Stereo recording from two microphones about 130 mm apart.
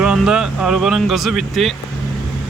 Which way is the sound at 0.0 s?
5° right (ahead or behind).